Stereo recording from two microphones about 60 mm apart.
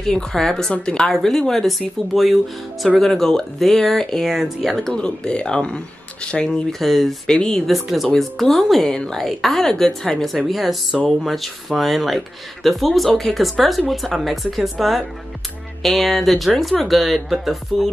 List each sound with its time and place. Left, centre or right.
0.0 s speech: centre
5.0 s speech: centre
6.8 s speech: centre
7.3 s speech: centre
7.6 s speech: centre
9.2 s speech: centre